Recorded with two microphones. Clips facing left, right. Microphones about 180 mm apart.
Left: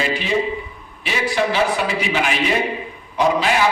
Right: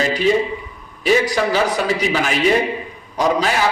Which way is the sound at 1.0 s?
40° right (ahead or behind).